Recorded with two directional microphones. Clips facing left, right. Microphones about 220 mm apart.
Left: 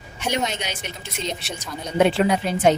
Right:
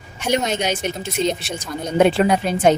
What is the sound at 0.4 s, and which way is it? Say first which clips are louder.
Speech: right 7 dB; 45° right (ahead or behind).